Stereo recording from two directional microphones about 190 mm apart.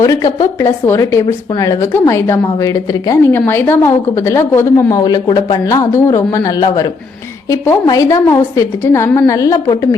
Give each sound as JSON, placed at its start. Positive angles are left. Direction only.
{"t": 0.0, "sound": "a woman's voice", "side_deg": 15}